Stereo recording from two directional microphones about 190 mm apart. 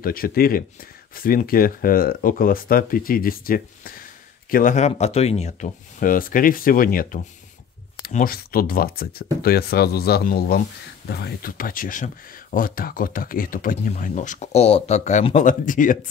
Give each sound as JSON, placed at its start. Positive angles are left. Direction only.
{"t": 0.0, "sound": "speech", "side_deg": 50}